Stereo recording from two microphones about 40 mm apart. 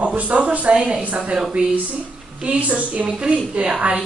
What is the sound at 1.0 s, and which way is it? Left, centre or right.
Speech, right.